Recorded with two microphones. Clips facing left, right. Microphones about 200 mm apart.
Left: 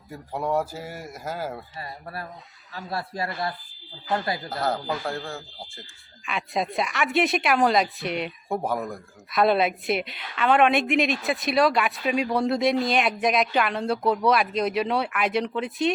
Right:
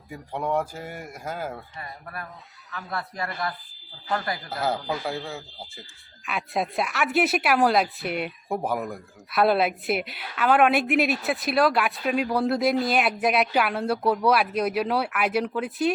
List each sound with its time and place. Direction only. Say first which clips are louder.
0.1 s speech: left 1 dB; 5° left (ahead or behind)
1.8 s a man's voice: left 2 dB; 30° left (ahead or behind)
4.6 s speech: right 1 dB; centre (ahead or behind)